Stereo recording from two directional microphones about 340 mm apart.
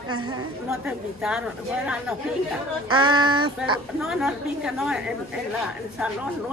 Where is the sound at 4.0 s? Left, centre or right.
Centre.